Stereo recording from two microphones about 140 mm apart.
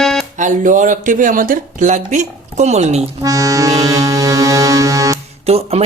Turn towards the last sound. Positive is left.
turn(degrees=-50)  # may be behind; listen again after turning